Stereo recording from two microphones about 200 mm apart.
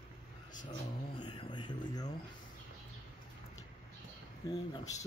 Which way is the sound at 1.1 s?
20° left (ahead or behind).